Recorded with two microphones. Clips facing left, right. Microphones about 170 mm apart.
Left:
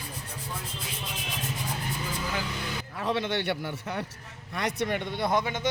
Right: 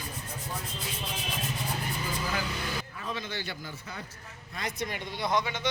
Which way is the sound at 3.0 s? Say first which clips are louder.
Left 12 dB; 70° left (ahead or behind).